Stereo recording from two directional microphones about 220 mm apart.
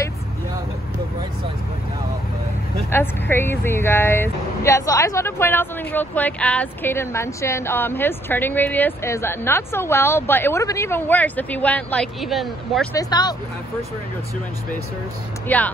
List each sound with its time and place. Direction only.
2.9 s speech: 10° left (ahead or behind)
12.9 s speech: 20° left (ahead or behind)
15.4 s speech: 5° left (ahead or behind)